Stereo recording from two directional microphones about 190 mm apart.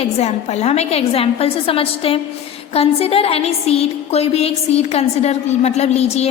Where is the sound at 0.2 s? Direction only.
35° left (ahead or behind).